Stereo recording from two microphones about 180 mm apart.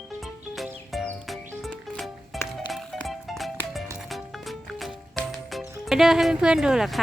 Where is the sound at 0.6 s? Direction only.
Centre (ahead or behind).